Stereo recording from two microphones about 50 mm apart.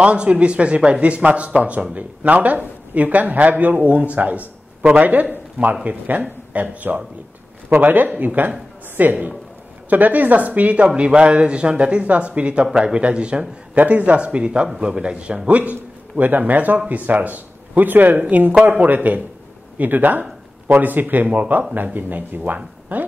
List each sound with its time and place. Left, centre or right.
0.0 s speech: right
13.7 s speech: right
22.9 s a sound: right